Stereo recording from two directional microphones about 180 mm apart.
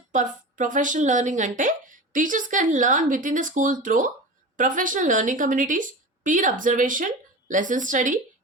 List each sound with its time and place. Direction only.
0.1 s a woman's voice: 45° right (ahead or behind)